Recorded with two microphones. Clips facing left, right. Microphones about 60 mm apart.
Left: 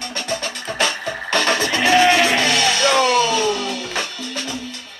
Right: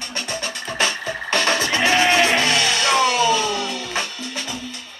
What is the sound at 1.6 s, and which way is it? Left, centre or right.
Music, right.